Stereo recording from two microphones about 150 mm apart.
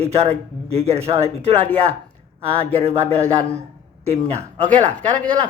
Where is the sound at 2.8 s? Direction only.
45° right (ahead or behind).